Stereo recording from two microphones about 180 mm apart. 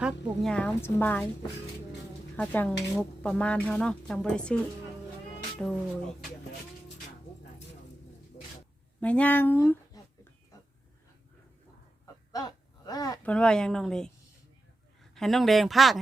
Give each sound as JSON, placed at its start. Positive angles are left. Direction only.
{"t": 0.0, "sound": "a woman's voice", "side_deg": 5}
{"t": 2.3, "sound": "a woman's voice", "side_deg": 10}
{"t": 5.6, "sound": "speech", "side_deg": 5}
{"t": 8.4, "sound": "a sound", "side_deg": 40}
{"t": 9.0, "sound": "speech", "side_deg": 5}
{"t": 12.3, "sound": "a sound", "side_deg": 20}
{"t": 13.2, "sound": "speech", "side_deg": 5}
{"t": 15.1, "sound": "speech", "side_deg": 0}